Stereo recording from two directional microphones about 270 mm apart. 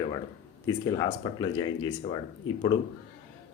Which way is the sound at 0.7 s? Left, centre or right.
Centre.